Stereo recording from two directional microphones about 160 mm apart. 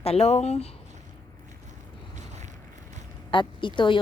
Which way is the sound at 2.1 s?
45° right (ahead or behind).